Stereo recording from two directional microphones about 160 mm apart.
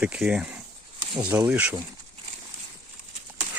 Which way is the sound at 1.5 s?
10° right (ahead or behind).